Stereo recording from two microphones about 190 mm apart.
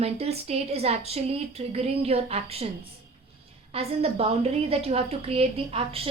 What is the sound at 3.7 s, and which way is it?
A woman's voice, 30° right (ahead or behind).